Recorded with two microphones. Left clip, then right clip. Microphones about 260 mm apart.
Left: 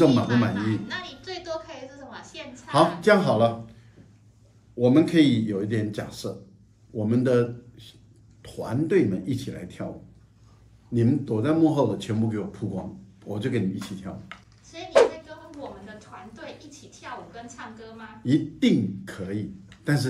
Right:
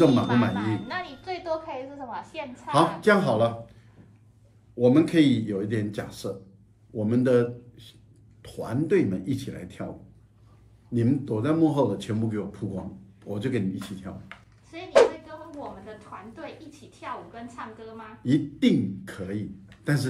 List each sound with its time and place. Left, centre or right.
0.0 s speech: centre
0.6 s a sound: centre
2.7 s speech: centre
4.7 s a man's voice: centre
10.9 s speech: centre
14.9 s a sound: centre
18.2 s speech: centre